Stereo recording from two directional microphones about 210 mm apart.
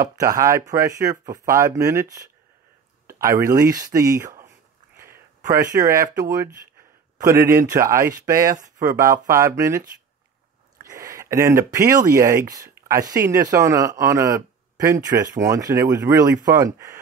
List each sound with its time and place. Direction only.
0.1 s speech: 15° right (ahead or behind)
5.0 s a sound: 10° right (ahead or behind)
6.1 s speech: 15° right (ahead or behind)